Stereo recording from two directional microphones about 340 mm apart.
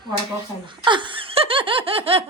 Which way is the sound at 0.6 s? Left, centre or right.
Centre.